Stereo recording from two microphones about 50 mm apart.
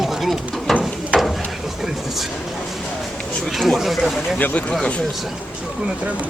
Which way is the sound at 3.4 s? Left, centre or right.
Centre.